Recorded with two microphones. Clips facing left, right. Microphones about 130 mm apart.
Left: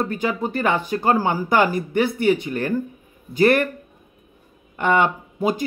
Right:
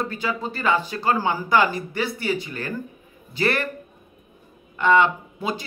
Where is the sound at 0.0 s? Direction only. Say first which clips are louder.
Left 4 dB; 50° left (ahead or behind).